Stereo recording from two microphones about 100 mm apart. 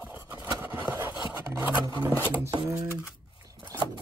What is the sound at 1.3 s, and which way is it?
Scrape, 20° right (ahead or behind).